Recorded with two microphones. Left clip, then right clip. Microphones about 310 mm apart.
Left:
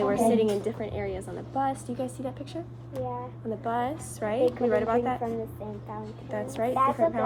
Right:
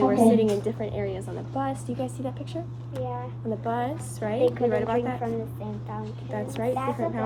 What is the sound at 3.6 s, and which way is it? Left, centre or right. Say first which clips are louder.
A woman's voice: even; centre.